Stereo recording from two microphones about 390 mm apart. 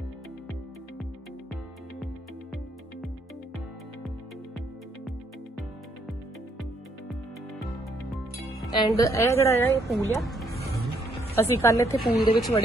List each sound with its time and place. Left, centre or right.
8.5 s speech: centre